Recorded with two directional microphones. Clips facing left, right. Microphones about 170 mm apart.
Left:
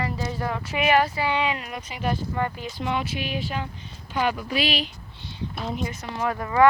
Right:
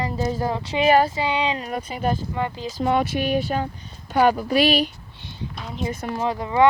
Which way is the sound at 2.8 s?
45° right (ahead or behind).